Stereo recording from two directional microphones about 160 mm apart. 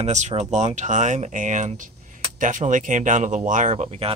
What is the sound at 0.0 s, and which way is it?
Speech, 45° right (ahead or behind).